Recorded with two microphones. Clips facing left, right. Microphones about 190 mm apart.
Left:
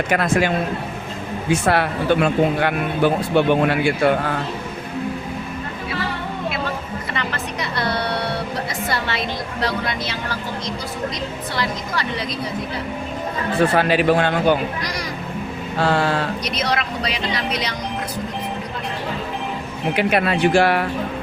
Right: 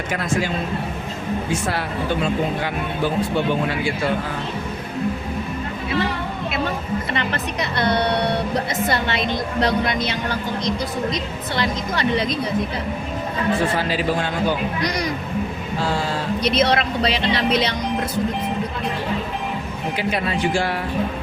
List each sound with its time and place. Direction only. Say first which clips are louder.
0.1 s speech: left 4 dB; 65° left (ahead or behind)
1.6 s speech: left 5 dB; 65° left (ahead or behind)
7.8 s a sound: right 4 dB; 20° right (ahead or behind)
8.9 s a woman's voice: right 2 dB; 20° right (ahead or behind)
13.7 s speech: left 5 dB; 65° left (ahead or behind)
14.8 s a woman's voice: right 4 dB; 20° right (ahead or behind)
15.8 s speech: left 5 dB; 65° left (ahead or behind)
16.4 s a woman's voice: right 5 dB; 25° right (ahead or behind)
20.0 s speech: left 5 dB; 65° left (ahead or behind)